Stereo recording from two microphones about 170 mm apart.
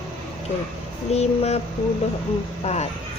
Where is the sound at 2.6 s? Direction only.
40° left (ahead or behind).